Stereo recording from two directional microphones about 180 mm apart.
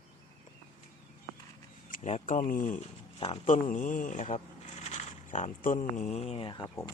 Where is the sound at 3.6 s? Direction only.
45° left (ahead or behind); by 6.6 s 30° left (ahead or behind).